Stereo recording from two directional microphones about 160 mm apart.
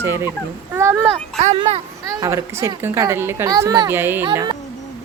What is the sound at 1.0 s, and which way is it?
Speech, 40° right (ahead or behind).